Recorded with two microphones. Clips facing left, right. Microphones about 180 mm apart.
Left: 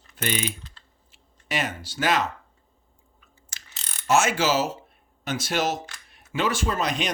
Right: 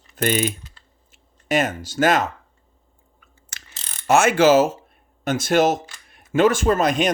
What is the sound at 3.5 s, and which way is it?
Mechanisms, 60° right (ahead or behind).